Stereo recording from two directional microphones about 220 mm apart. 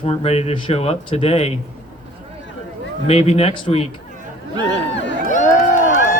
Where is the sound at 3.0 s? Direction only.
30° left (ahead or behind).